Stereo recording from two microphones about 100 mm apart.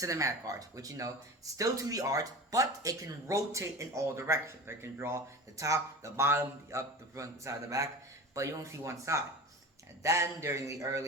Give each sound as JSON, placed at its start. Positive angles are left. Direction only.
{"t": 0.0, "sound": "speech", "side_deg": -30}